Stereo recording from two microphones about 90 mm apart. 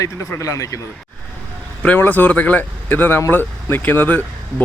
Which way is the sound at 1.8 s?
20° left (ahead or behind).